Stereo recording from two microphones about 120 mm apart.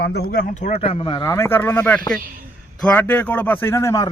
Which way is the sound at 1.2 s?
25° left (ahead or behind).